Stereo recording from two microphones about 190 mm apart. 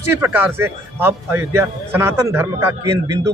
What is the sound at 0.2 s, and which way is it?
A man's voice, 10° right (ahead or behind).